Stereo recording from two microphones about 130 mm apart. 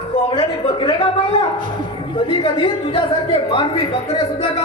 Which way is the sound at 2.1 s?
40° left (ahead or behind).